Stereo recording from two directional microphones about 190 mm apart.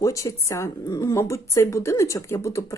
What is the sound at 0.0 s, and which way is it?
Speech, 15° left (ahead or behind).